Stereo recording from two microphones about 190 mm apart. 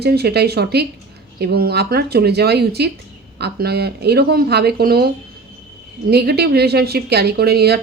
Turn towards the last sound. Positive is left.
turn(degrees=-55)  # may be behind; listen again after turning